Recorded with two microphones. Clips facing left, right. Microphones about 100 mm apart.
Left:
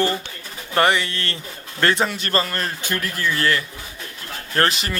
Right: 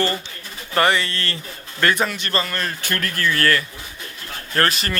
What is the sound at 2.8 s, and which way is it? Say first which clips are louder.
Speech: right 2 dB; 15° left (ahead or behind).